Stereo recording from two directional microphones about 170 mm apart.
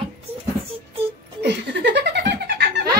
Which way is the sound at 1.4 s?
90° right.